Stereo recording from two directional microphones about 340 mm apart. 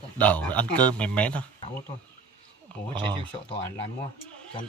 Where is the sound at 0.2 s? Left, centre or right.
Centre.